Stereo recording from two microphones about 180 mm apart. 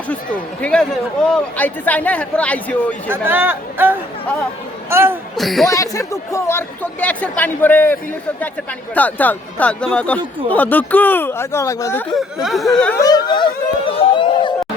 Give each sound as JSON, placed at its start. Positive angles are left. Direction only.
{"t": 0.6, "sound": "speech", "side_deg": 5}
{"t": 3.1, "sound": "speech", "side_deg": -10}
{"t": 5.4, "sound": "speech", "side_deg": 0}
{"t": 5.6, "sound": "speech", "side_deg": 20}
{"t": 9.0, "sound": "speech", "side_deg": 10}
{"t": 12.1, "sound": "speech", "side_deg": 0}
{"t": 13.0, "sound": "speech", "side_deg": 20}
{"t": 13.9, "sound": "music", "side_deg": 30}